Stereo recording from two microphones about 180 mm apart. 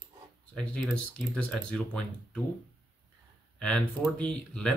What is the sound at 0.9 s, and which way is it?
Speech, 5° left (ahead or behind).